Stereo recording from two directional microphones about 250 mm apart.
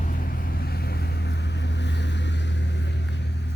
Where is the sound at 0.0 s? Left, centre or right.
Left.